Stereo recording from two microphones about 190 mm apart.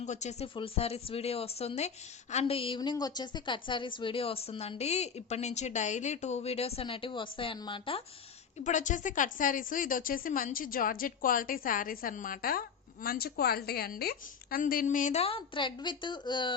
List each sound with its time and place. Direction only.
0.0 s a woman's voice: 35° left (ahead or behind)
8.6 s speech: 40° left (ahead or behind); by 16.5 s 25° left (ahead or behind)